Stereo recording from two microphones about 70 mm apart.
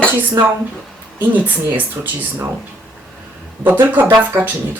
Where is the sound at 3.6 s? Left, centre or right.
Right.